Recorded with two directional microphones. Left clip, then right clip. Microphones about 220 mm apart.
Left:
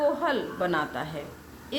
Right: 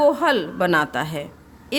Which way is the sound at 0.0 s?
55° right (ahead or behind).